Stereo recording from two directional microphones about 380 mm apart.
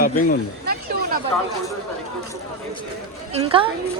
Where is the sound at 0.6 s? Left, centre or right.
Right.